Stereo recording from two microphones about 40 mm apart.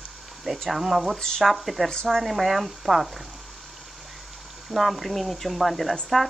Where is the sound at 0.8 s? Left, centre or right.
Centre.